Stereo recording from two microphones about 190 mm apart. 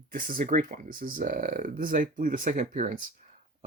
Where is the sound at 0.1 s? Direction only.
45° right (ahead or behind).